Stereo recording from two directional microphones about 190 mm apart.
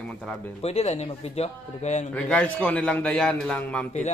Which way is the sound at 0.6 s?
35° left (ahead or behind).